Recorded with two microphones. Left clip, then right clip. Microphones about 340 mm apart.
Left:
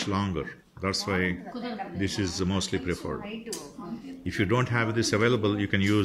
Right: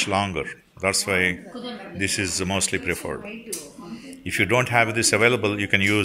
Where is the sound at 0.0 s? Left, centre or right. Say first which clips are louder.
Right 7 dB; centre.